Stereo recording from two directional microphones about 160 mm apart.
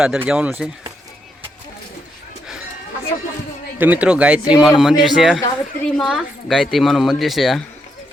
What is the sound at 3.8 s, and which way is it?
Speech, 10° right (ahead or behind).